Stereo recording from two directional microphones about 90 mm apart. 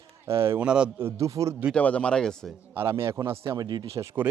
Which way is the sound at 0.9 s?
30° right (ahead or behind).